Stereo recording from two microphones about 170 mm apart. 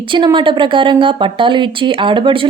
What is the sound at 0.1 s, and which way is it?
A woman's voice, 30° right (ahead or behind).